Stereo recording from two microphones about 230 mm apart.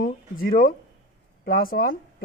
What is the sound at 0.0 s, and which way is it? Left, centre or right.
Speech, left.